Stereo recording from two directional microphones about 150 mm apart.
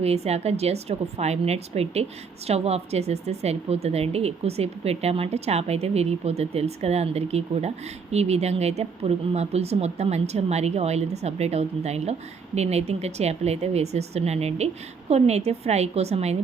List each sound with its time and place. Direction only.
0.0 s a woman's voice: 45° right (ahead or behind)